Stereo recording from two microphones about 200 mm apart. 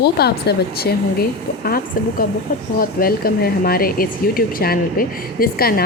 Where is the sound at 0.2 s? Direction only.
50° left (ahead or behind).